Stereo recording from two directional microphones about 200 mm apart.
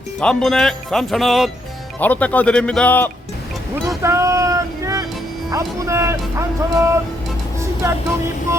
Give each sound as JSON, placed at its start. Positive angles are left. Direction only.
{"t": 0.2, "sound": "speech", "side_deg": 5}
{"t": 4.0, "sound": "vehicle", "side_deg": -15}
{"t": 5.5, "sound": "speech", "side_deg": -15}
{"t": 7.6, "sound": "vehicle", "side_deg": -15}